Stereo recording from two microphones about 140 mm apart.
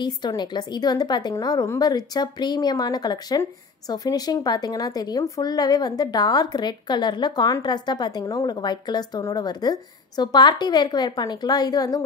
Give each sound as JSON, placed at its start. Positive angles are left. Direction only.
{"t": 0.0, "sound": "a woman's voice", "side_deg": 30}